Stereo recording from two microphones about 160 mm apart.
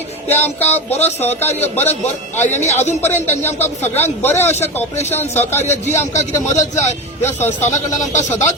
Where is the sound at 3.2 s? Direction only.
15° left (ahead or behind).